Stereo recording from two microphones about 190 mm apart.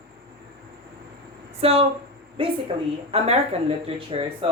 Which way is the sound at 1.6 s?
30° right (ahead or behind).